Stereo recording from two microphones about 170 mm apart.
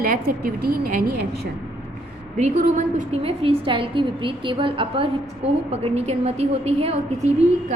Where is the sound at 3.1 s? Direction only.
35° right (ahead or behind).